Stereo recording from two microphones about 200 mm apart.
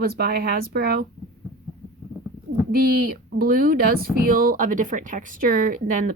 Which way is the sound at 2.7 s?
50° right (ahead or behind).